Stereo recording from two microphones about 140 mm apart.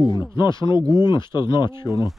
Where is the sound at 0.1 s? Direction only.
30° left (ahead or behind).